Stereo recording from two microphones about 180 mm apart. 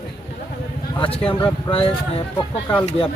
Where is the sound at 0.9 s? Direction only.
30° left (ahead or behind).